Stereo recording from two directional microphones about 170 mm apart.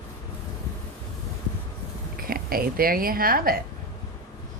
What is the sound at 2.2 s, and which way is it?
Speech, 60° right (ahead or behind).